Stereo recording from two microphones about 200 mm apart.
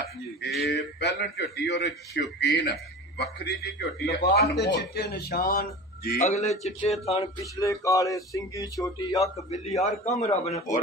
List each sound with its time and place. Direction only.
0.6 s a man's voice: 50° left (ahead or behind)
6.2 s speech: 35° left (ahead or behind)
7.5 s speech: 15° left (ahead or behind)
9.8 s speech: 35° left (ahead or behind)